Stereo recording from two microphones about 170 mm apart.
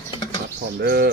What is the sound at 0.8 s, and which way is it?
Speech, 65° right (ahead or behind).